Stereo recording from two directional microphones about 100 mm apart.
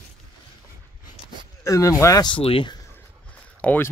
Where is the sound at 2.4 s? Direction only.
65° left (ahead or behind).